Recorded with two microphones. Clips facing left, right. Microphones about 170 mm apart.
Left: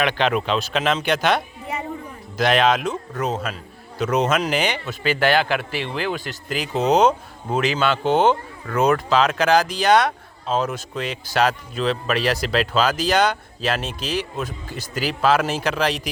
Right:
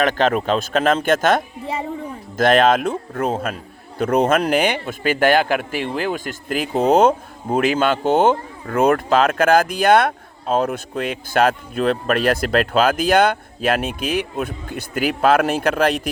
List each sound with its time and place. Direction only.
0.0 s speech: 45° right (ahead or behind)